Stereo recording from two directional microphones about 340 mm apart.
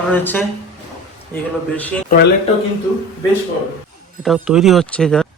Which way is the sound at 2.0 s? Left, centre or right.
Left.